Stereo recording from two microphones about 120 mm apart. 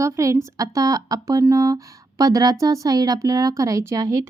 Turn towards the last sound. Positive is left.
turn(degrees=-25)  # may be behind; listen again after turning